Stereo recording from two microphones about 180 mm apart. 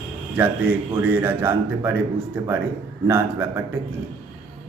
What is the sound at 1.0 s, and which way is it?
Speech, 10° right (ahead or behind).